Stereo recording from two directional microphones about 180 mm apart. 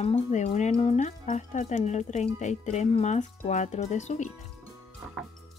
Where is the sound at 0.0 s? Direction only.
35° left (ahead or behind).